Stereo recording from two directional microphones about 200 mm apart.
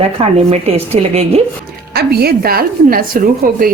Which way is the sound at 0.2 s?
30° right (ahead or behind).